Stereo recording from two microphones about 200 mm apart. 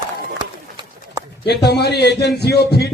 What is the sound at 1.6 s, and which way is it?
A man's voice, 55° left (ahead or behind).